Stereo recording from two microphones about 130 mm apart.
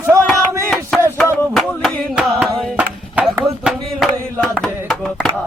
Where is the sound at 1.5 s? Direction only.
5° left (ahead or behind).